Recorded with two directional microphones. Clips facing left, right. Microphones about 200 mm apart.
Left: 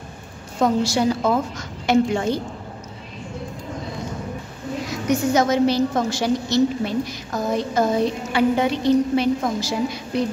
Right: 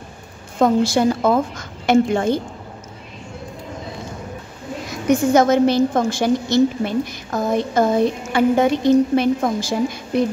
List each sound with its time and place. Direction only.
0.6 s a woman's voice: 55° right (ahead or behind)
5.1 s a woman's voice: 50° right (ahead or behind)